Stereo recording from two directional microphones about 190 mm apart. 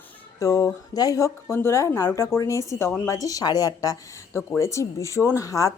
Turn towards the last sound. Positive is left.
turn(degrees=15)  # may be behind; listen again after turning